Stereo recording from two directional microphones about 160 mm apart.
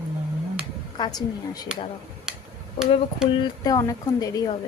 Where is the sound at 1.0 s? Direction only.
25° left (ahead or behind).